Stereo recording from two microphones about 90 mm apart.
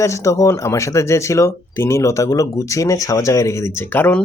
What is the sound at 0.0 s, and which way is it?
Speech, 35° left (ahead or behind).